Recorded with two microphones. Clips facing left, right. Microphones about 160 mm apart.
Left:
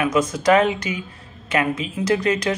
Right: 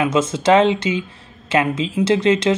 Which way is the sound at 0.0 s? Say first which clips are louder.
Right 2 dB; 25° right (ahead or behind).